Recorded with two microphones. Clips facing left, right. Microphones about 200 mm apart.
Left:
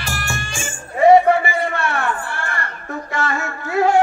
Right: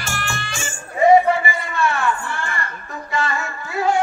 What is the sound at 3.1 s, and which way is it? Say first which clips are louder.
Music: even; 60° left (ahead or behind).